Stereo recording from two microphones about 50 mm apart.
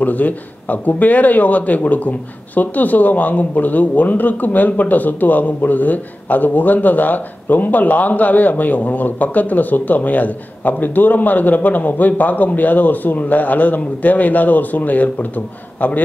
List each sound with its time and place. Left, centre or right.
0.0 s speech: left